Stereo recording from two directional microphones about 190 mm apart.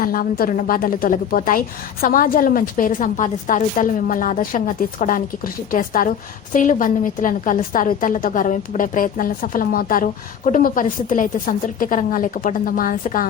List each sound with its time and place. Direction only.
0.0 s a woman's voice: 45° left (ahead or behind)